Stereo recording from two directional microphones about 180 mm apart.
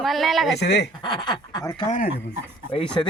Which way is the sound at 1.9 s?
55° left (ahead or behind).